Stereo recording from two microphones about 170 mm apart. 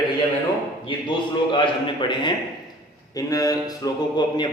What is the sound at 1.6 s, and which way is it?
A man's voice, 30° left (ahead or behind).